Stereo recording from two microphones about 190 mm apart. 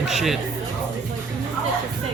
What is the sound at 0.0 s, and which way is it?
Music, centre (ahead or behind).